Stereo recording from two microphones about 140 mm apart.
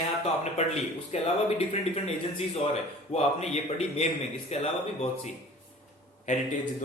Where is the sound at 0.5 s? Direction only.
55° left (ahead or behind).